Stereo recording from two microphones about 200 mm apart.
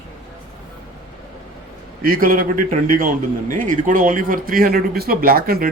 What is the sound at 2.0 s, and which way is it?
Speech, 45° right (ahead or behind).